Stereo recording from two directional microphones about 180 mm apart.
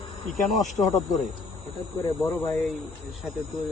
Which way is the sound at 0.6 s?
40° left (ahead or behind).